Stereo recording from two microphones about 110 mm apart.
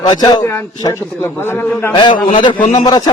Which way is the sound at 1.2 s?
20° left (ahead or behind).